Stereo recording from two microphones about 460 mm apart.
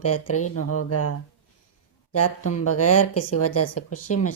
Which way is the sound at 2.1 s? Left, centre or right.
Left.